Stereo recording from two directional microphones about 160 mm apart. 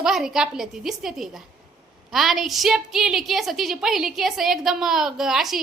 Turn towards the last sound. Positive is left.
turn(degrees=0)  # may be behind; listen again after turning